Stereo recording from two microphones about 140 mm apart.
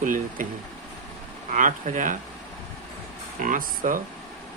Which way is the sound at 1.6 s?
70° right (ahead or behind).